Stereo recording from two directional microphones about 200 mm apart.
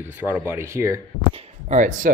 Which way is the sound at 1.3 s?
40° right (ahead or behind).